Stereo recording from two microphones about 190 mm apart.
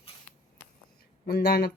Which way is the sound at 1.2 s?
55° left (ahead or behind).